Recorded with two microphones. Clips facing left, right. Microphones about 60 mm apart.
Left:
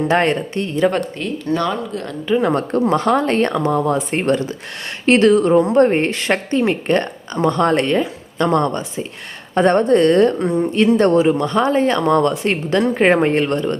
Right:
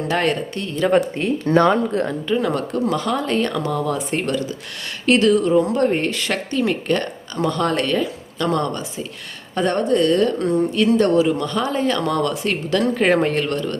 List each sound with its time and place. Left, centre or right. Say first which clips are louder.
0.1 s speech: left 1 dB; left
1.5 s speech: right 5 dB; right
2.4 s speech: left 4 dB; left
3.5 s speech: left 5 dB; left
10.3 s speech: left 1 dB; left
10.9 s speech: left 2 dB; left